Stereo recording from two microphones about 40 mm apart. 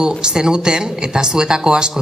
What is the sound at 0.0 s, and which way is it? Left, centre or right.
Speech, centre.